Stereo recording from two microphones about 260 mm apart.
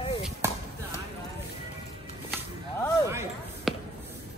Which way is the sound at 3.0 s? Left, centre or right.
Centre.